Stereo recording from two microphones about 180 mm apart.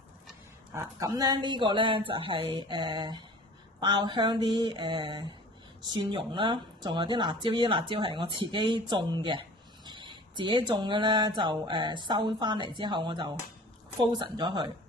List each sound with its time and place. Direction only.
0.7 s speech: 20° right (ahead or behind)